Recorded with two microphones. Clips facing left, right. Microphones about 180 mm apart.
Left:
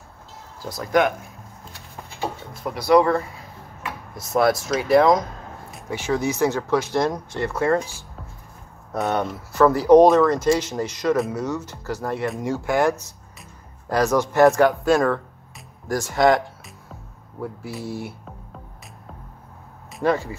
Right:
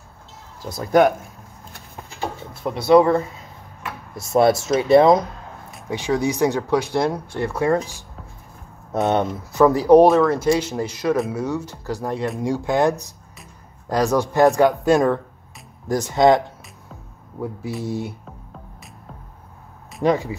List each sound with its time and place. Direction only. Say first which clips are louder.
0.7 s speech: right 4 dB; 25° right (ahead or behind)
2.6 s speech: right 3 dB; 25° right (ahead or behind)
5.9 s speech: right 2 dB; 15° right (ahead or behind)
9.0 s speech: right 4 dB; 25° right (ahead or behind)
17.8 s speech: right 4 dB; 20° right (ahead or behind)
20.0 s speech: right 2 dB; 15° right (ahead or behind)